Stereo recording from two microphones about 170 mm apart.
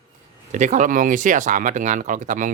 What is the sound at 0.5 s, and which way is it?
Speech, 50° right (ahead or behind).